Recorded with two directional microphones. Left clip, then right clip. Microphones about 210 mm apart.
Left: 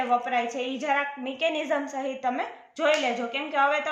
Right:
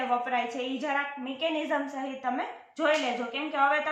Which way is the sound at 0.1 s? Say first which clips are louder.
Left 3 dB; 55° left (ahead or behind).